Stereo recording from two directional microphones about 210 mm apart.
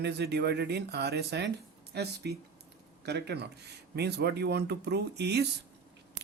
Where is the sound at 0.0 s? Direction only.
50° right (ahead or behind).